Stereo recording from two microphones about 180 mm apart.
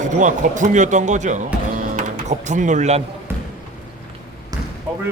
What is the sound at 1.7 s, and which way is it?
Music, 40° right (ahead or behind).